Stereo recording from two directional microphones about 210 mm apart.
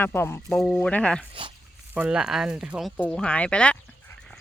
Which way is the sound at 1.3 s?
25° right (ahead or behind).